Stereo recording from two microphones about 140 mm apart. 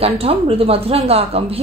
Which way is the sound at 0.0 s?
45° right (ahead or behind).